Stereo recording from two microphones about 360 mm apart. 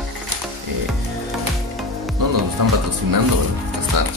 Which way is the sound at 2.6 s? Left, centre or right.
Right.